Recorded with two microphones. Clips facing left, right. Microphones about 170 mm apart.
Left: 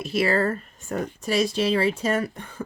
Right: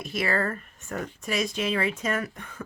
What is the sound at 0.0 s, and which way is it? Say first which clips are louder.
Speech: left 5 dB; 35° left (ahead or behind).